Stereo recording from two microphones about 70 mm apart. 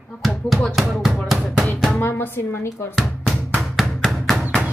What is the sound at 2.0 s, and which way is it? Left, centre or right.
Music, left.